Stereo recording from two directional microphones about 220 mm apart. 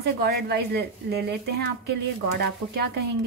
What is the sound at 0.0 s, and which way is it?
A woman's voice, 50° right (ahead or behind).